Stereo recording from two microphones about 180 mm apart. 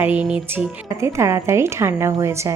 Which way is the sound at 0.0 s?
10° right (ahead or behind).